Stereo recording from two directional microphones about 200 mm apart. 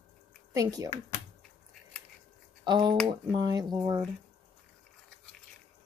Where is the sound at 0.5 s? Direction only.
15° right (ahead or behind).